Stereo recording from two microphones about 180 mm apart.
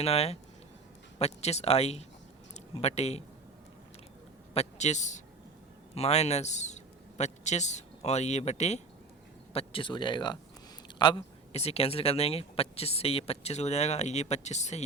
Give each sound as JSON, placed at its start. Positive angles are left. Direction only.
{"t": 0.0, "sound": "speech", "side_deg": 35}
{"t": 4.5, "sound": "a man's voice", "side_deg": 40}